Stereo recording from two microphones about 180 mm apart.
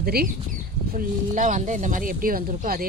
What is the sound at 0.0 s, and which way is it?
Speech, 60° right (ahead or behind).